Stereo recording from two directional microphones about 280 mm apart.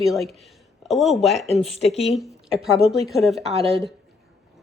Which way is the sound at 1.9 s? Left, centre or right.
Left.